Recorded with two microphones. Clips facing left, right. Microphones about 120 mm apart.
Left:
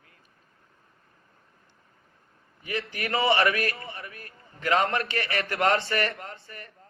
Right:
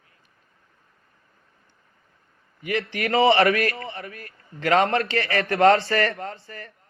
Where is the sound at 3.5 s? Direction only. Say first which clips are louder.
Right 6 dB; 25° left (ahead or behind).